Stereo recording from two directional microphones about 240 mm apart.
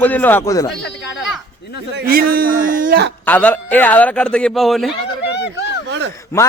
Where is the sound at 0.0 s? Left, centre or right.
Centre.